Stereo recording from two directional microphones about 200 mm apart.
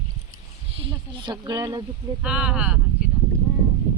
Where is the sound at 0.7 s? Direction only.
25° right (ahead or behind).